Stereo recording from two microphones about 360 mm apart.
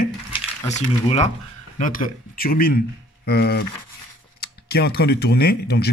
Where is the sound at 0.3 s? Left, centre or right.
Centre.